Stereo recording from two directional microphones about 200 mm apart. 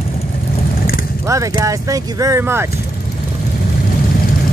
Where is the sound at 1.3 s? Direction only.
15° right (ahead or behind).